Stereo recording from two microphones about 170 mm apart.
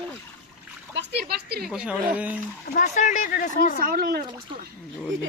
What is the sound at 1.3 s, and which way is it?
Speech, 70° right (ahead or behind).